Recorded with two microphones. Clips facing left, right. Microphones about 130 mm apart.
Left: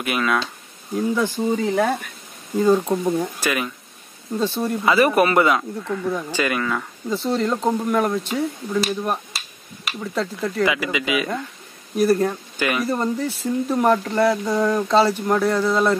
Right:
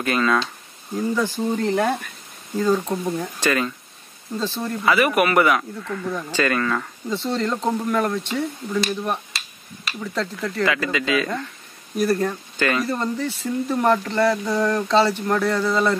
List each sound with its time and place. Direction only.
0.0 s speech: 10° left (ahead or behind)
2.5 s speech: 15° left (ahead or behind)
4.9 s speech: 30° left (ahead or behind)
5.6 s speech: 10° left (ahead or behind)
10.6 s speech: 15° left (ahead or behind)